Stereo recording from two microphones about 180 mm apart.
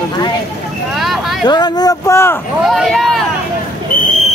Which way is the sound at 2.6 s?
Centre (ahead or behind).